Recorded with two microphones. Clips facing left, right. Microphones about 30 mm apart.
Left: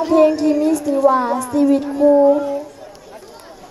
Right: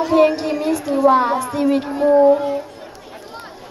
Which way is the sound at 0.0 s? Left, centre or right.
Right.